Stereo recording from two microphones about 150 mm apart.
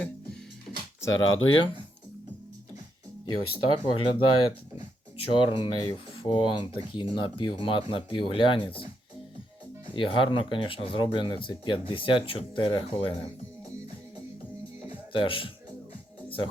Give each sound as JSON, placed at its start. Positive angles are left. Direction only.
{"t": 1.0, "sound": "speech", "side_deg": 30}
{"t": 3.5, "sound": "speech", "side_deg": 35}
{"t": 9.9, "sound": "speech", "side_deg": 35}
{"t": 15.1, "sound": "speech", "side_deg": 35}